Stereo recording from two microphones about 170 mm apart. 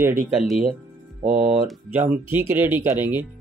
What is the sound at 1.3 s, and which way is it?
Speech, 55° right (ahead or behind).